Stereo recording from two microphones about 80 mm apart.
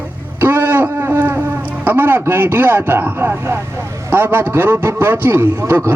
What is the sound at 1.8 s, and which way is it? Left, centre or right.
A man's voice, right.